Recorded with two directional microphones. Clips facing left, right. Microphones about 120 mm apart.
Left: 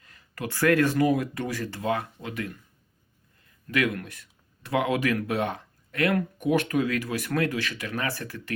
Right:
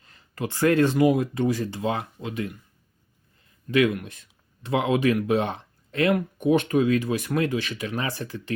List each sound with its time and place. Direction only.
0.0 s speech: 25° right (ahead or behind)
3.7 s speech: 20° right (ahead or behind)